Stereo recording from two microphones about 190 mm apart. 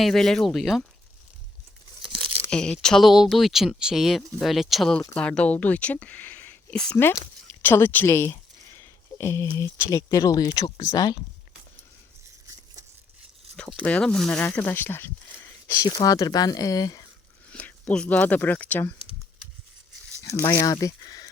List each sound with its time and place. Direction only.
0.0 s speech: centre (ahead or behind)
2.1 s speech: 5° left (ahead or behind); by 11.2 s 20° left (ahead or behind)
13.6 s speech: 5° left (ahead or behind)
17.5 s speech: 5° left (ahead or behind)
20.5 s speech: 15° left (ahead or behind)